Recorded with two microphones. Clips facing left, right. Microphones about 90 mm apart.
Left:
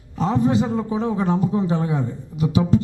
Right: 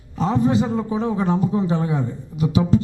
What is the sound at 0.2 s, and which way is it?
A man's voice, 15° right (ahead or behind).